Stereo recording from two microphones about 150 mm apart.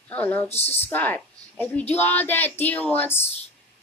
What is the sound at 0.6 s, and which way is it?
Speech, 45° left (ahead or behind).